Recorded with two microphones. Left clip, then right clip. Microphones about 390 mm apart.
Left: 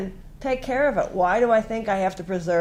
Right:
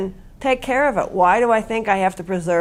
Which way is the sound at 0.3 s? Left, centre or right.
Right.